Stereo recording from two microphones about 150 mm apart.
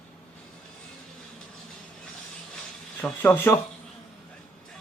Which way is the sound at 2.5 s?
10° left (ahead or behind).